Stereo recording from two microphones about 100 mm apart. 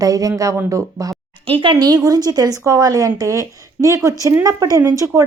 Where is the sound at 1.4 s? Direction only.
60° right (ahead or behind).